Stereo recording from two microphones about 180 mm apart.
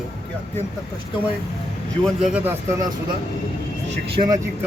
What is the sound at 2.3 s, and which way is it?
Speech, 10° right (ahead or behind).